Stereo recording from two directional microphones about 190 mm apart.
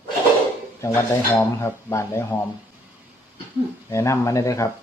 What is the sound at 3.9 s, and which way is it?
Speech, 15° left (ahead or behind).